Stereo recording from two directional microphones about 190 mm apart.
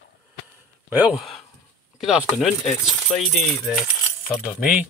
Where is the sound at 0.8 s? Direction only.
10° right (ahead or behind).